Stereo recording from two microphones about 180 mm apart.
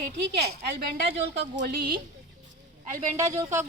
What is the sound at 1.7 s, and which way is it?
Speech, 60° right (ahead or behind).